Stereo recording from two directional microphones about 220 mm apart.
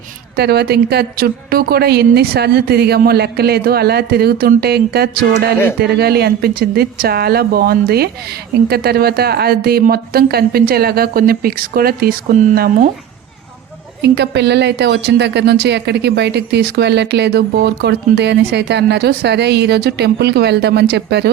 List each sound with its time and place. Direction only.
0.3 s a woman's voice: 45° right (ahead or behind)
14.0 s a woman's voice: 50° right (ahead or behind)